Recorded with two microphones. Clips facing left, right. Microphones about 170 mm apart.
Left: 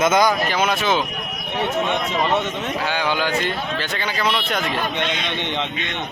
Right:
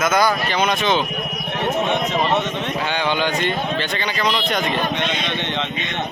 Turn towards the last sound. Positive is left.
turn(degrees=15)  # may be behind; listen again after turning